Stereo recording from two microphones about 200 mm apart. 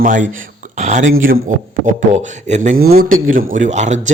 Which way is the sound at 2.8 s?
50° right (ahead or behind).